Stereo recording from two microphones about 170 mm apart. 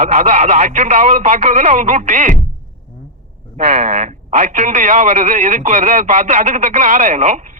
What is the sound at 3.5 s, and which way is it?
A man's voice, 40° right (ahead or behind).